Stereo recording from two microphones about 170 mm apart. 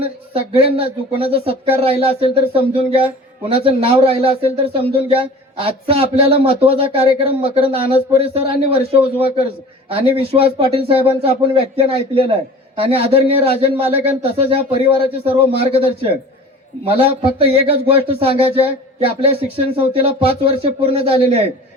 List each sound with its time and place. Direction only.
0.0 s a man's voice: 35° right (ahead or behind)